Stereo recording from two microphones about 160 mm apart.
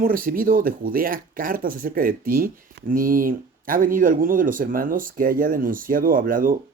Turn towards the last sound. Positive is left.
turn(degrees=-60)  # may be behind; listen again after turning